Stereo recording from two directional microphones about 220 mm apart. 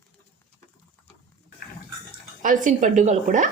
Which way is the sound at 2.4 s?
35° right (ahead or behind).